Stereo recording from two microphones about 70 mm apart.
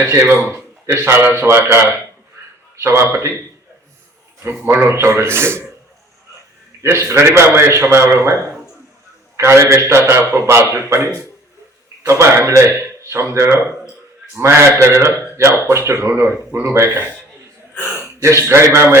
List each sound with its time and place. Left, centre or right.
0.1 s a man's voice: right
4.8 s a man's voice: right
6.8 s a man's voice: right
12.0 s a man's voice: right
18.2 s a man's voice: right